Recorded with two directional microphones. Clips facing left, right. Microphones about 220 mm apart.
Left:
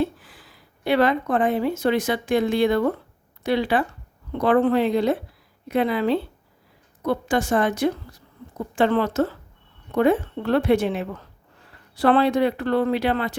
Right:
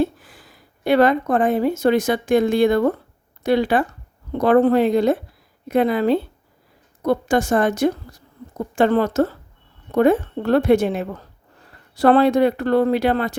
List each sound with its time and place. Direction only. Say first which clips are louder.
0.0 s a woman's voice: right 3 dB; 45° right (ahead or behind)